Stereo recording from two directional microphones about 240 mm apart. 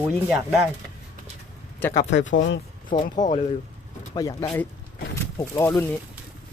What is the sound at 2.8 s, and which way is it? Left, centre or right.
Speech, left.